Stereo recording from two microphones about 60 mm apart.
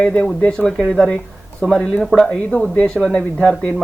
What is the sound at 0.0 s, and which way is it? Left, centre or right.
A woman's voice, centre.